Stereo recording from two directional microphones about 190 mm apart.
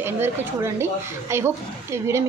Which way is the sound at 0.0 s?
15° right (ahead or behind).